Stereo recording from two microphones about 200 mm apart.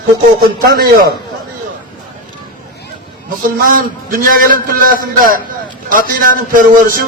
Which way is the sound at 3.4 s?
45° right (ahead or behind).